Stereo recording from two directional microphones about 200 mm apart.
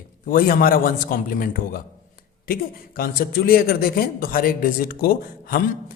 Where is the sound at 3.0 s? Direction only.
50° left (ahead or behind).